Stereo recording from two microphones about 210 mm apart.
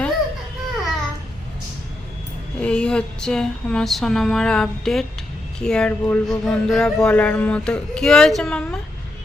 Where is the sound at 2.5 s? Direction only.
5° left (ahead or behind).